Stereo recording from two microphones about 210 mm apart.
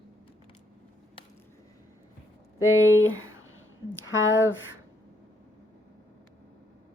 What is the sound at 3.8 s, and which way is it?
Speech, 65° left (ahead or behind).